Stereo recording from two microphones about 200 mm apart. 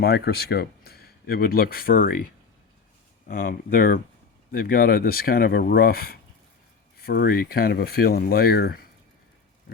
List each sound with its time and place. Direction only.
0.0 s speech: 55° left (ahead or behind)
3.2 s speech: 45° left (ahead or behind)